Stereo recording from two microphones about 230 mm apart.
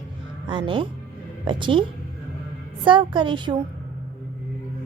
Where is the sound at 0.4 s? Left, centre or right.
Right.